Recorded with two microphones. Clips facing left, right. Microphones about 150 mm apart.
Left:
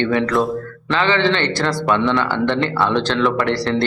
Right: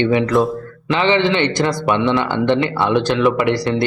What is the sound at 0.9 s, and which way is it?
A man's voice, 15° right (ahead or behind).